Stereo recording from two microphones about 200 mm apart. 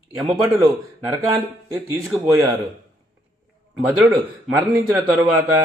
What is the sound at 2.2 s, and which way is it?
Speech, 20° right (ahead or behind).